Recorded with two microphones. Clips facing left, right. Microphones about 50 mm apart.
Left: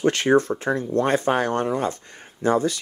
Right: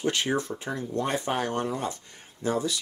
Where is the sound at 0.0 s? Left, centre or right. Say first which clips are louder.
Left 9 dB; left.